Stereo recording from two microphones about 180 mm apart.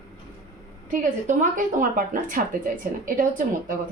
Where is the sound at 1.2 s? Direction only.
45° right (ahead or behind).